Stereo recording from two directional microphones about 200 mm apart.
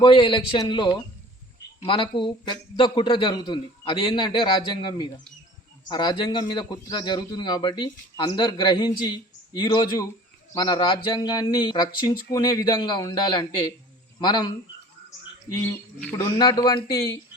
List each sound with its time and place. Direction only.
0.0 s a man's voice: 25° left (ahead or behind)
16.1 s a man's voice: 20° left (ahead or behind)